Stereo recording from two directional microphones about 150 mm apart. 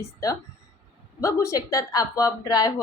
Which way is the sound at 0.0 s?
20° left (ahead or behind).